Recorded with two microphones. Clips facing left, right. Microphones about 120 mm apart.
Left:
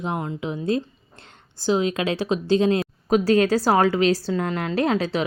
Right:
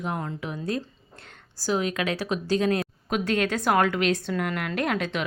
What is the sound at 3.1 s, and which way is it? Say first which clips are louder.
A woman's voice: left 8 dB; 35° left (ahead or behind).